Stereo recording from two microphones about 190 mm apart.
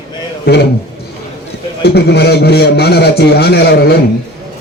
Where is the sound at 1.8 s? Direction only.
60° left (ahead or behind).